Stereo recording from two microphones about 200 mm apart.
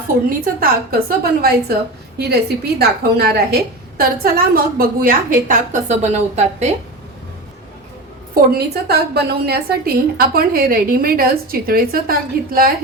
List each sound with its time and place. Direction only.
0.4 s a woman's voice: 45° right (ahead or behind)
8.5 s a woman's voice: 55° right (ahead or behind)